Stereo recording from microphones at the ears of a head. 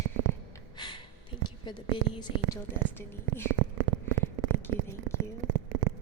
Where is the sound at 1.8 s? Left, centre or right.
Right.